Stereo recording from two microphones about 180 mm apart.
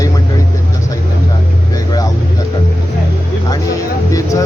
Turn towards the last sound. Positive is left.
turn(degrees=15)  # may be behind; listen again after turning